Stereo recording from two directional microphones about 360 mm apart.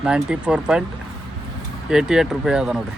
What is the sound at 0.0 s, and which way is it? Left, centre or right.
Speech, centre.